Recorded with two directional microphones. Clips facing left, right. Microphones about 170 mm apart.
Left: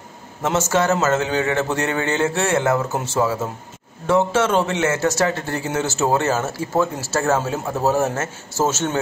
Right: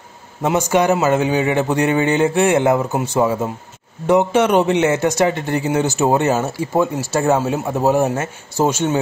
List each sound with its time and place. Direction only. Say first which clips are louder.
0.4 s a man's voice: right 3 dB; 15° right (ahead or behind)